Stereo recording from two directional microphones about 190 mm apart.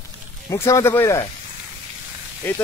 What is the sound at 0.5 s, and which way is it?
Speech, 15° left (ahead or behind).